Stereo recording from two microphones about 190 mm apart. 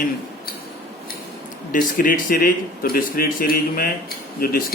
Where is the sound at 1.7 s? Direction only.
45° left (ahead or behind).